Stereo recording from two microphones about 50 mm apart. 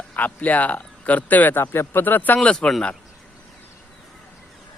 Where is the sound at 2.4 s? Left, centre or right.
Centre.